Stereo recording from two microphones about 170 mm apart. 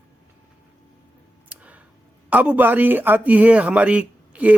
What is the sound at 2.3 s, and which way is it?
Speech, 10° right (ahead or behind).